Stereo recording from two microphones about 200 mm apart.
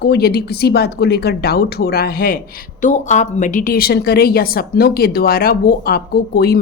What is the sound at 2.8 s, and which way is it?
A woman's voice, 40° left (ahead or behind).